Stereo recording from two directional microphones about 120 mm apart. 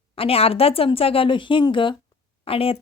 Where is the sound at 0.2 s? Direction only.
55° left (ahead or behind).